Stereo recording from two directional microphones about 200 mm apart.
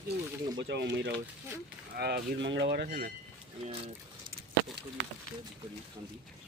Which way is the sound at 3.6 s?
30° right (ahead or behind).